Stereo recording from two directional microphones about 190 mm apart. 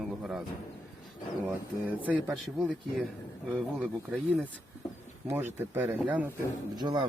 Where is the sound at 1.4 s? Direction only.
10° right (ahead or behind).